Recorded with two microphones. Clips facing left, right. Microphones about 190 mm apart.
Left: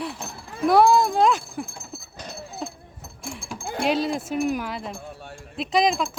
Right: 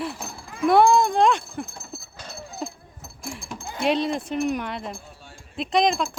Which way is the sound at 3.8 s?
Centre (ahead or behind).